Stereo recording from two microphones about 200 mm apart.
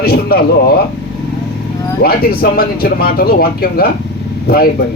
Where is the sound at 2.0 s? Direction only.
50° left (ahead or behind).